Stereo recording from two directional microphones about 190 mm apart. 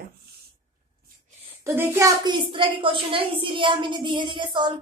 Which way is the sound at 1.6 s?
15° right (ahead or behind).